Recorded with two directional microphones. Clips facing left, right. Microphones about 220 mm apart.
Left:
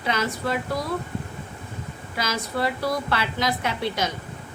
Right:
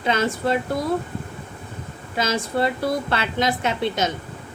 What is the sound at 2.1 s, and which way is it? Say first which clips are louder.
A woman's voice: right 5 dB; 25° right (ahead or behind).